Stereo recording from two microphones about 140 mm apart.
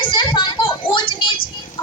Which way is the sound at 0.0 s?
35° left (ahead or behind).